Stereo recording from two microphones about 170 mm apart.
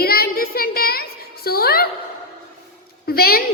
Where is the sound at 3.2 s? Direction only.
60° left (ahead or behind).